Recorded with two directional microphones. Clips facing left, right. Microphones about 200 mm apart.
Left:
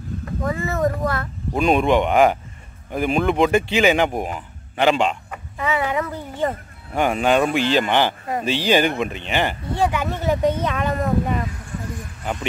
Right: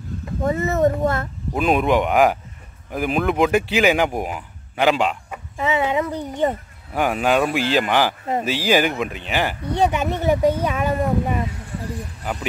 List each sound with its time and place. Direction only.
0.4 s speech: 25° right (ahead or behind)
1.5 s speech: 5° right (ahead or behind)
5.6 s a sound: 20° right (ahead or behind)
6.9 s speech: 5° right (ahead or behind)
9.6 s speech: 20° right (ahead or behind)